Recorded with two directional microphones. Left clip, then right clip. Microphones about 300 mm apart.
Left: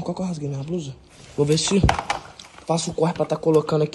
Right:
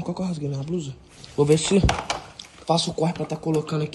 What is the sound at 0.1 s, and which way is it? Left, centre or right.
Speech, centre.